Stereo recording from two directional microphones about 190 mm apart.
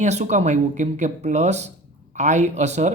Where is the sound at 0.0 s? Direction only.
40° right (ahead or behind).